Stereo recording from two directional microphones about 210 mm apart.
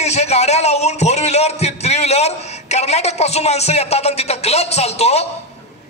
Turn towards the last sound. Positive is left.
turn(degrees=30)  # may be behind; listen again after turning